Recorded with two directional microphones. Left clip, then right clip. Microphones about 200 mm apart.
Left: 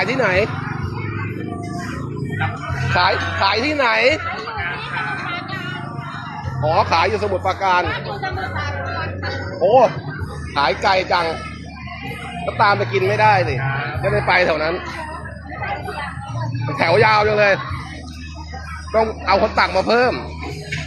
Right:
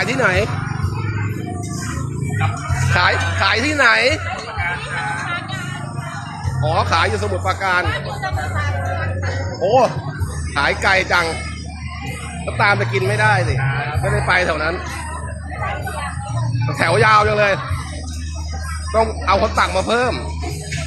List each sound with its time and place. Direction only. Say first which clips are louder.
0.0 s speech: even; 10° right (ahead or behind)
2.9 s speech: right 1 dB; 10° right (ahead or behind)
6.6 s speech: left 1 dB; centre (ahead or behind)
7.9 s speech: right 1 dB; 25° right (ahead or behind)
9.6 s speech: left 2 dB; 10° right (ahead or behind)
12.5 s speech: even; 10° right (ahead or behind)
12.9 s speech: left 2 dB; centre (ahead or behind)
16.7 s speech: right 1 dB; 5° right (ahead or behind)
18.9 s speech: even; centre (ahead or behind)